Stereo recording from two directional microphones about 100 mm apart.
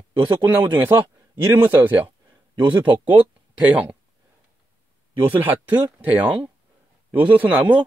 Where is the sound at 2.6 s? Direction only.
55° right (ahead or behind).